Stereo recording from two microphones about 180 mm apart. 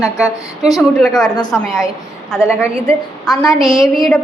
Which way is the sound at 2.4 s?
15° left (ahead or behind).